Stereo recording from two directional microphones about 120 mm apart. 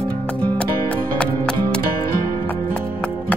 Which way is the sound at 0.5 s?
10° left (ahead or behind).